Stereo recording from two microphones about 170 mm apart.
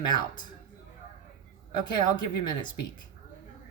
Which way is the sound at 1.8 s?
25° left (ahead or behind).